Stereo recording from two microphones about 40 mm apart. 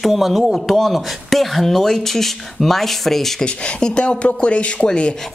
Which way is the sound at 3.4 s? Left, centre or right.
Left.